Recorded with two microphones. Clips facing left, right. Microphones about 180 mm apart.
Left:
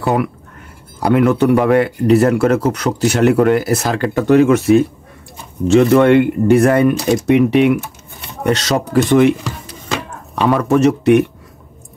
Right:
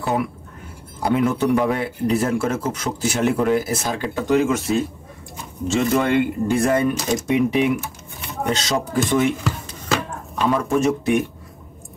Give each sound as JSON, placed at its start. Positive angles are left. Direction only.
{"t": 0.0, "sound": "speech", "side_deg": 65}
{"t": 9.4, "sound": "a sound", "side_deg": 0}
{"t": 10.3, "sound": "speech", "side_deg": 70}